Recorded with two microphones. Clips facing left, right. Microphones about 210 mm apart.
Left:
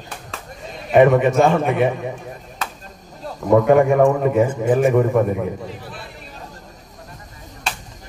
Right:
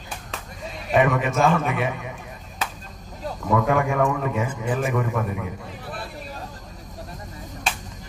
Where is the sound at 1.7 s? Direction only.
35° left (ahead or behind).